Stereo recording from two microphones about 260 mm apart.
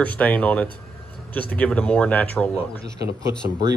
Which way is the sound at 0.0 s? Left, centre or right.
Centre.